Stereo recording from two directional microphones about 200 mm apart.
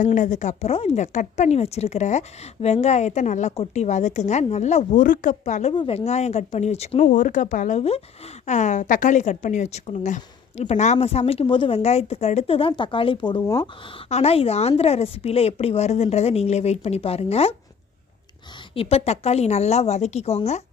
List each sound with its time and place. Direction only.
0.0 s a woman's voice: 40° left (ahead or behind)
5.7 s a woman's voice: 25° left (ahead or behind)
14.1 s a woman's voice: 30° left (ahead or behind)
18.7 s a woman's voice: 30° left (ahead or behind)